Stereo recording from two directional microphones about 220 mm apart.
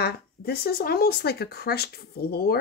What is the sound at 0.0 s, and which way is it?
Speech, 45° left (ahead or behind).